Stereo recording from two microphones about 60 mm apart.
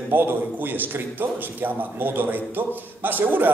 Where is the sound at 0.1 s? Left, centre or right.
Right.